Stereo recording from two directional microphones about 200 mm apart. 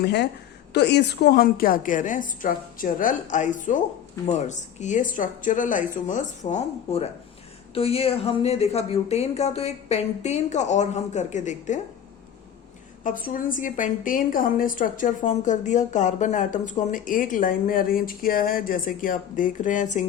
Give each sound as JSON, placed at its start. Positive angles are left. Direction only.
{"t": 0.0, "sound": "a woman's voice", "side_deg": 55}
{"t": 13.1, "sound": "a woman's voice", "side_deg": 45}